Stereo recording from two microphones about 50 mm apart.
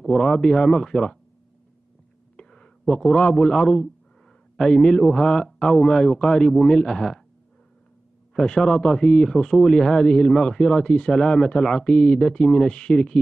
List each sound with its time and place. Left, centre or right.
0.0 s speech: centre
2.3 s a sound: centre
2.9 s speech: centre
8.4 s speech: centre